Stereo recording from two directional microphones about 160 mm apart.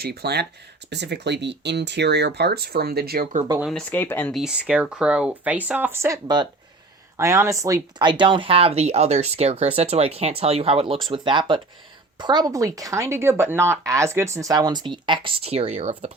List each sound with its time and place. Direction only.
0.0 s speech: 90° right
3.6 s speech: centre (ahead or behind)
3.9 s speech: 15° left (ahead or behind)
4.3 s speech: centre (ahead or behind); by 16.1 s 40° right (ahead or behind)